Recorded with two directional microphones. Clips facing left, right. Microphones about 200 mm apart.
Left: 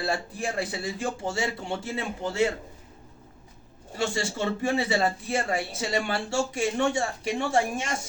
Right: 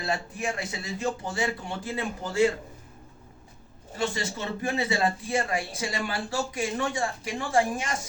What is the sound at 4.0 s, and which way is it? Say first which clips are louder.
A man's voice: left 2 dB; 30° left (ahead or behind).